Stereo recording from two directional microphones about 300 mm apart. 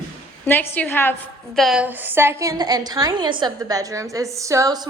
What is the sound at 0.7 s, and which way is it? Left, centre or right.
A woman's voice, centre.